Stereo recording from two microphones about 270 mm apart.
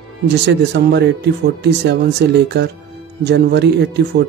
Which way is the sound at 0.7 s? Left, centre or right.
Right.